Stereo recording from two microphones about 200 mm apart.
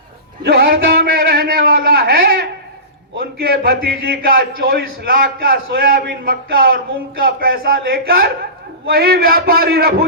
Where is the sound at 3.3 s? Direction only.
50° right (ahead or behind).